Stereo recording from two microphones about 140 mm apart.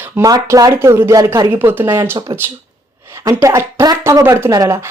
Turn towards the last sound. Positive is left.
turn(degrees=-25)  # may be behind; listen again after turning